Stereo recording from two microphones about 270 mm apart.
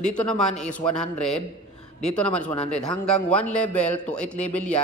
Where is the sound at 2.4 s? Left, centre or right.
Left.